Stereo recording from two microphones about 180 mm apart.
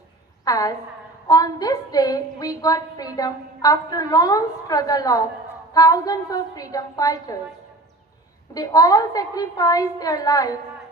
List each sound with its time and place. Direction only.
0.4 s a woman's voice: 20° left (ahead or behind)
8.5 s a woman's voice: 20° left (ahead or behind)